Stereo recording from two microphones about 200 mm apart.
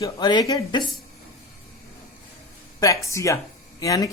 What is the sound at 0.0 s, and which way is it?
Speech, 20° left (ahead or behind).